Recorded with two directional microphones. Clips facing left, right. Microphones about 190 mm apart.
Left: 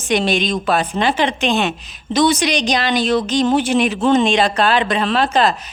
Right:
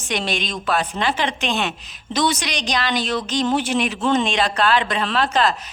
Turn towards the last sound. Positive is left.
turn(degrees=15)  # may be behind; listen again after turning